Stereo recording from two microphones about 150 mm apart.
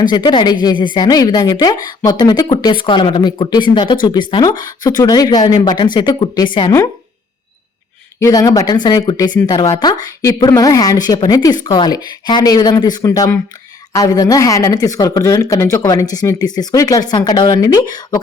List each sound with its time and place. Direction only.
0.0 s speech: 30° left (ahead or behind)
8.2 s speech: 25° left (ahead or behind)